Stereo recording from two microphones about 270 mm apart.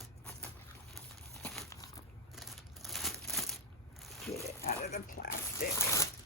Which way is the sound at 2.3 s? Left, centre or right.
Centre.